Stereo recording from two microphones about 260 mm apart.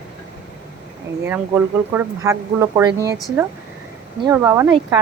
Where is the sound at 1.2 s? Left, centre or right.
Centre.